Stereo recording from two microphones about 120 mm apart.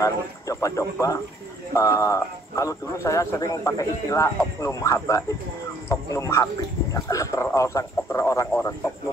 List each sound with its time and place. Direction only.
0.0 s speech: 25° left (ahead or behind)